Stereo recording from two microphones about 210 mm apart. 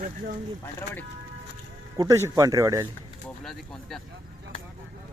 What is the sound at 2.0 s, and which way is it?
Speech, 15° right (ahead or behind).